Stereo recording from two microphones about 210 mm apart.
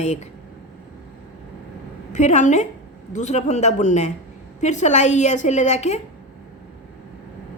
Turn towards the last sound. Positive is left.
turn(degrees=30)  # may be behind; listen again after turning